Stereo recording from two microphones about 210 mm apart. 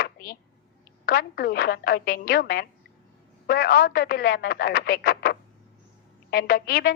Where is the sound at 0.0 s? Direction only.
45° left (ahead or behind).